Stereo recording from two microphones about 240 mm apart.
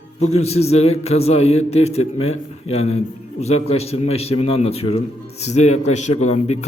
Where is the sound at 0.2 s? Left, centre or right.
Left.